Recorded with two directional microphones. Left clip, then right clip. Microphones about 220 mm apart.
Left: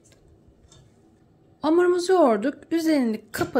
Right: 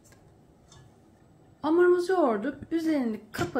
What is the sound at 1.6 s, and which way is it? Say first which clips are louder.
A woman's voice: left 2 dB; 40° left (ahead or behind).